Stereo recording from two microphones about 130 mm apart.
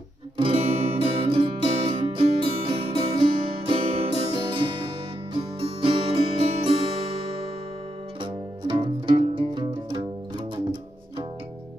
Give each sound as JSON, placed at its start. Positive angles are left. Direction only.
{"t": 0.4, "sound": "music", "side_deg": -40}
{"t": 8.2, "sound": "music", "side_deg": -40}